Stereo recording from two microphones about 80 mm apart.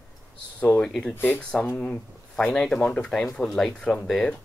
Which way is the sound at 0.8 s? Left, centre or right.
Centre.